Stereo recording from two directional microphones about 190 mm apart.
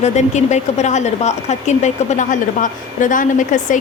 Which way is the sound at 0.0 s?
35° left (ahead or behind).